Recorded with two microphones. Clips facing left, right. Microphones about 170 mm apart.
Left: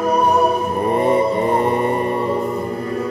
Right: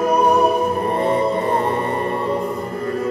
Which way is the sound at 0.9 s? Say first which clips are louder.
Left 4 dB; 15° left (ahead or behind).